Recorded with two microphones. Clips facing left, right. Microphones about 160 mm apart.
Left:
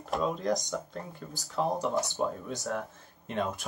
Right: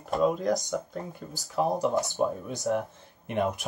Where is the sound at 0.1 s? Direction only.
5° right (ahead or behind).